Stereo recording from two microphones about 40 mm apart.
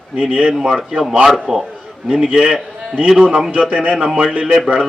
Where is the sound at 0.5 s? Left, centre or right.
Centre.